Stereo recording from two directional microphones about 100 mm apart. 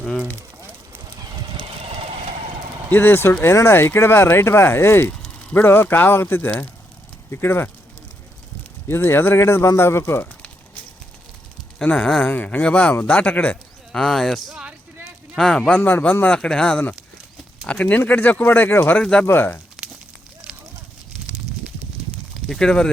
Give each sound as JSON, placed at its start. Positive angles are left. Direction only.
{"t": 0.0, "sound": "a sound", "side_deg": 5}
{"t": 2.9, "sound": "speech", "side_deg": 20}
{"t": 8.9, "sound": "speech", "side_deg": 25}
{"t": 11.8, "sound": "speech", "side_deg": 10}
{"t": 14.6, "sound": "a sound", "side_deg": -10}
{"t": 15.4, "sound": "speech", "side_deg": 5}
{"t": 22.4, "sound": "speech", "side_deg": 5}